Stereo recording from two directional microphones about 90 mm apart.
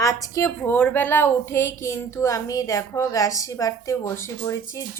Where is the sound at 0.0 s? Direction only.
40° left (ahead or behind).